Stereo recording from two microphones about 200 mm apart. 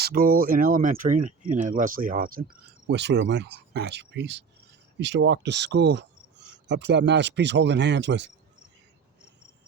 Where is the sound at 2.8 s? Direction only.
60° right (ahead or behind).